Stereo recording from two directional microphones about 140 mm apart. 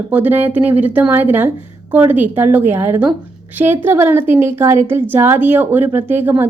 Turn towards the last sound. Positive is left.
turn(degrees=-15)  # may be behind; listen again after turning